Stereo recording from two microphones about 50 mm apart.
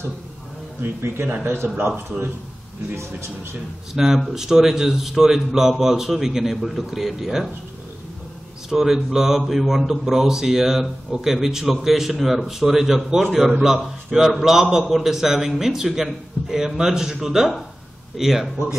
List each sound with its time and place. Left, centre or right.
0.7 s a man's voice: right
3.9 s speech: centre
8.6 s speech: centre